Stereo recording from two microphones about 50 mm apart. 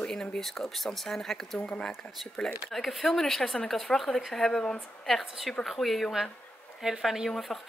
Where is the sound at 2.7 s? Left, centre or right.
Centre.